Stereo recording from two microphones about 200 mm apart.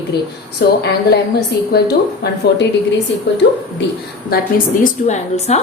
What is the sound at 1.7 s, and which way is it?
Speech, 55° left (ahead or behind).